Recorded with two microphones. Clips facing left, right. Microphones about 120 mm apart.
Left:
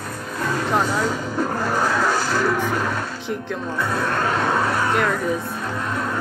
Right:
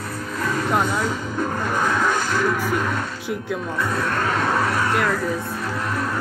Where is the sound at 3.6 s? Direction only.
30° left (ahead or behind).